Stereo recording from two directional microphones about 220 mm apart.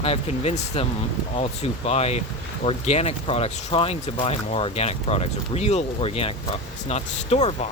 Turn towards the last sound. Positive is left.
turn(degrees=30)  # may be behind; listen again after turning